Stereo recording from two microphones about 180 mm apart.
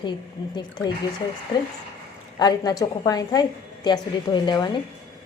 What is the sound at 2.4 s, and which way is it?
A woman's voice, 20° left (ahead or behind).